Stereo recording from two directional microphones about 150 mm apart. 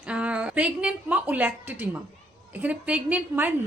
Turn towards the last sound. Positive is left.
turn(degrees=-10)  # may be behind; listen again after turning